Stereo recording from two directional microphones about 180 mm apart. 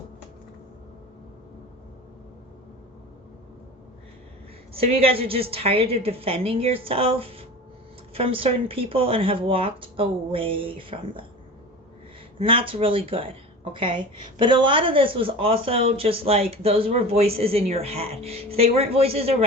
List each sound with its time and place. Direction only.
4.7 s speech: 30° right (ahead or behind)
12.4 s a woman's voice: 30° right (ahead or behind)